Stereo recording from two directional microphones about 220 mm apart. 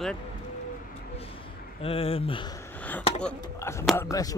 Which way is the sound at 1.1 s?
25° left (ahead or behind).